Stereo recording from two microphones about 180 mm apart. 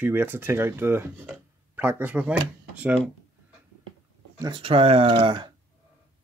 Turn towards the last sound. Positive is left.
turn(degrees=-25)  # may be behind; listen again after turning